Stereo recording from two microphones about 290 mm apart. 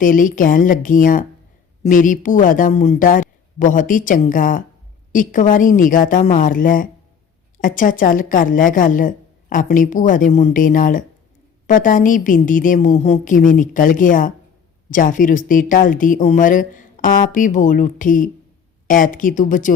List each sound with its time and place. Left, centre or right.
0.0 s speech: left